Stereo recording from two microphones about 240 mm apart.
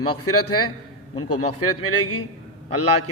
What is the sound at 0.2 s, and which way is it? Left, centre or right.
Speech, left.